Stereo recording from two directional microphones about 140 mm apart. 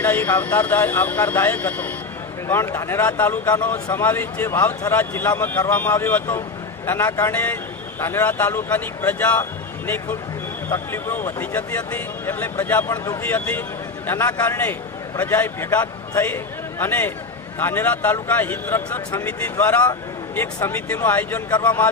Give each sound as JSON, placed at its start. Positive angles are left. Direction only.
{"t": 0.0, "sound": "a man's voice", "side_deg": 15}